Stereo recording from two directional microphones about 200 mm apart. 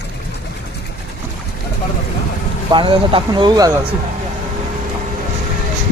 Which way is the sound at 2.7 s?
25° right (ahead or behind).